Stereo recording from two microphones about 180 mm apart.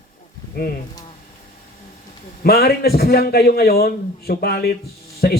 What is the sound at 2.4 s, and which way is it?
A man's voice, 60° left (ahead or behind).